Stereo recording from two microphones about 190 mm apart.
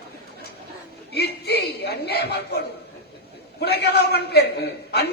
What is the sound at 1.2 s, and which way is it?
Chuckle, 60° left (ahead or behind).